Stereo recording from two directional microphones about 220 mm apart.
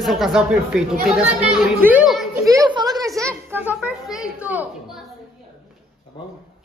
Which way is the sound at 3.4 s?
10° right (ahead or behind).